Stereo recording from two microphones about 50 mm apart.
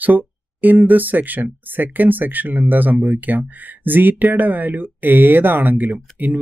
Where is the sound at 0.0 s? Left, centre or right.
Right.